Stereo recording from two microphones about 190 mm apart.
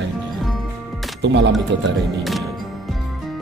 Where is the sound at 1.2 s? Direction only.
65° right (ahead or behind).